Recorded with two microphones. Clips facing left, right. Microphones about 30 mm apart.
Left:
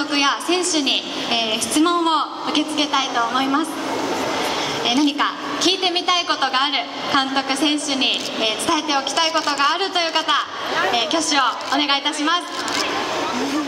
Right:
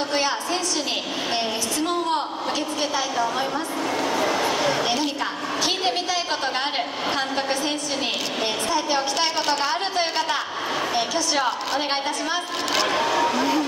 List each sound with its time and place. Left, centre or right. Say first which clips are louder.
0.1 s a woman's voice: left 5 dB; left
3.2 s a woman's voice: left 6 dB; left
5.6 s a woman's voice: left 5 dB; left
13.4 s speech: right 1 dB; centre